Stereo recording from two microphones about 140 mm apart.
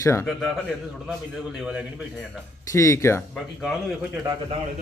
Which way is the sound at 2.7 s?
20° left (ahead or behind).